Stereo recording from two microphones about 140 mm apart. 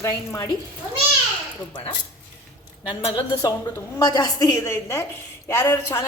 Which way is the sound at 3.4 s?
25° left (ahead or behind).